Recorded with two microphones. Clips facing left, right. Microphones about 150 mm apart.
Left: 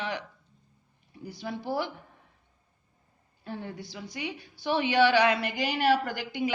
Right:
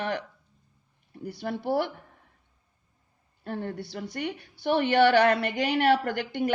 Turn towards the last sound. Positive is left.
turn(degrees=-60)  # may be behind; listen again after turning